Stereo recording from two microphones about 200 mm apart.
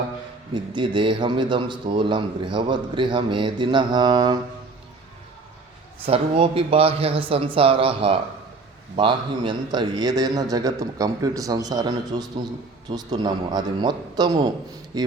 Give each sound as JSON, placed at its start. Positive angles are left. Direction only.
{"t": 0.5, "sound": "a man's voice", "side_deg": -25}
{"t": 6.1, "sound": "a man's voice", "side_deg": -25}